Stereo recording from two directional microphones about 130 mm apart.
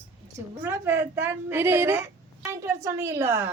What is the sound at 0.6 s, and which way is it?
A woman's voice, 15° right (ahead or behind).